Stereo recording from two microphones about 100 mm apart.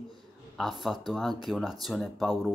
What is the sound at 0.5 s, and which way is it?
Speech, centre (ahead or behind).